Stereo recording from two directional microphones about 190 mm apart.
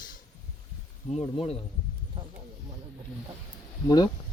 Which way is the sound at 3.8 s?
20° left (ahead or behind).